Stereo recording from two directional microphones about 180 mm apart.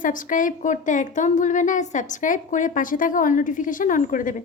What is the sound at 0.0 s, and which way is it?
A woman's voice, 45° left (ahead or behind).